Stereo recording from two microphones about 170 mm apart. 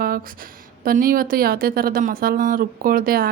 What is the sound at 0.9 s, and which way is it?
A woman's voice, 55° right (ahead or behind).